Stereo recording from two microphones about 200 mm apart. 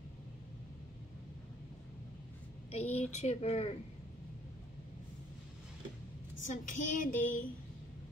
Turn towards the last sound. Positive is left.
turn(degrees=40)  # may be behind; listen again after turning